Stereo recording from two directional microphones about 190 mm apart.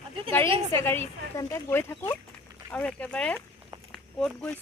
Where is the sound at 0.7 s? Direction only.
10° left (ahead or behind).